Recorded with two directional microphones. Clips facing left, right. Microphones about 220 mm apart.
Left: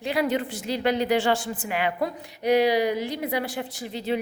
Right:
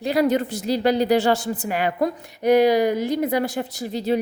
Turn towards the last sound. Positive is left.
turn(degrees=-40)  # may be behind; listen again after turning